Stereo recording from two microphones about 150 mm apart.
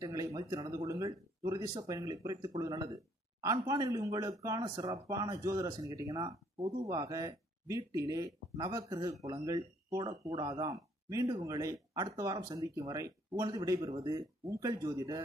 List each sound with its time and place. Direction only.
0.0 s speech: 20° right (ahead or behind)